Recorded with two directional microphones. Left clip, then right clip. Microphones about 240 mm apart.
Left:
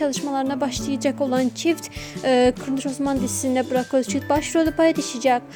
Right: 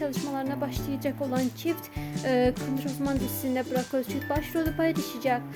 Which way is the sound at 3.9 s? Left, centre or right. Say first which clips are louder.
Left 9 dB; left.